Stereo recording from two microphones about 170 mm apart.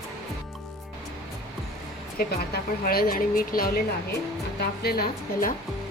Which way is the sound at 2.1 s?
60° left (ahead or behind).